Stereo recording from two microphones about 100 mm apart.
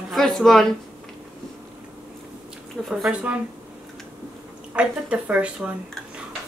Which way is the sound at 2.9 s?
Centre (ahead or behind).